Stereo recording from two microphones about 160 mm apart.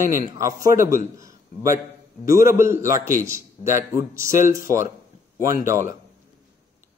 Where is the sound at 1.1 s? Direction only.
20° right (ahead or behind).